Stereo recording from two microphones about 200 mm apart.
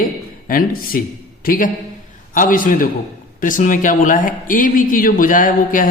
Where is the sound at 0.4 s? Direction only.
45° left (ahead or behind).